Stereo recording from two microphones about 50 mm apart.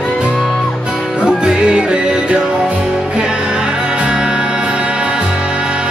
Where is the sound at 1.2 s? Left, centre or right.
Centre.